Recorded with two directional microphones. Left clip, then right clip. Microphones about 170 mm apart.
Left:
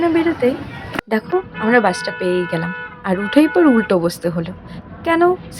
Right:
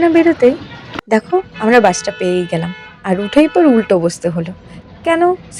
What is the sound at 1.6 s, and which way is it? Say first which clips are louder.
Speech: right 5 dB; 20° right (ahead or behind).